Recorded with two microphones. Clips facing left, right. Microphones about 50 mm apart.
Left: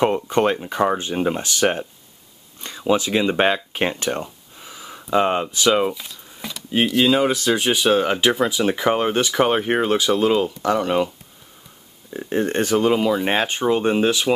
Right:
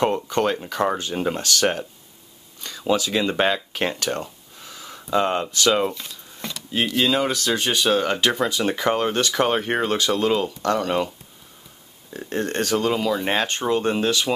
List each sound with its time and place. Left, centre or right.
0.3 s speech: left
2.6 s a sound: left
3.0 s speech: centre
12.1 s speech: centre